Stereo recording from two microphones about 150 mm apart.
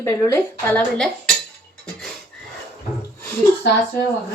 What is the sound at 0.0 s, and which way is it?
Speech, 20° left (ahead or behind).